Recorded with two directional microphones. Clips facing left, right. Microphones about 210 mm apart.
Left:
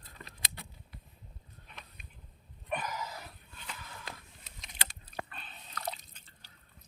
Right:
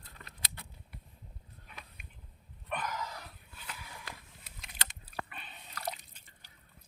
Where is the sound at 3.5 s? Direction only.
5° right (ahead or behind).